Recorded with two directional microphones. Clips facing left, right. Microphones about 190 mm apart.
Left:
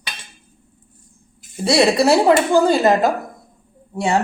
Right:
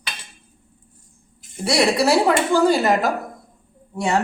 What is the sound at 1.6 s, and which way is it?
A woman's voice, 25° left (ahead or behind).